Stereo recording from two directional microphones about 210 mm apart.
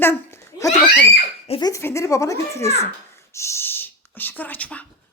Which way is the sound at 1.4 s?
25° left (ahead or behind).